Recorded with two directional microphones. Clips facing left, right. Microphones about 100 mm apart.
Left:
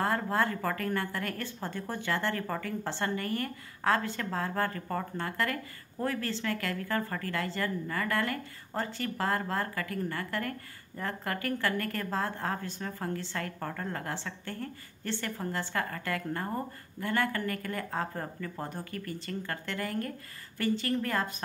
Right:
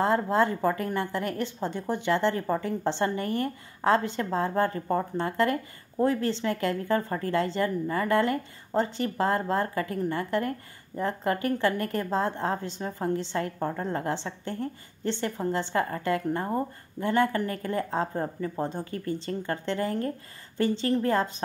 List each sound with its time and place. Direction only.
0.0 s a woman's voice: 20° right (ahead or behind)